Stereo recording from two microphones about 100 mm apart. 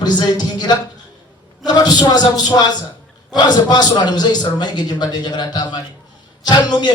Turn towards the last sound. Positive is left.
turn(degrees=45)  # may be behind; listen again after turning